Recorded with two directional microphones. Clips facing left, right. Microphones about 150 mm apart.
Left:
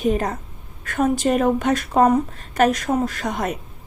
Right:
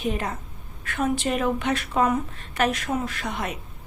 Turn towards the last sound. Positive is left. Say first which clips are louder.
# left 6 dB
turn(degrees=45)  # may be behind; listen again after turning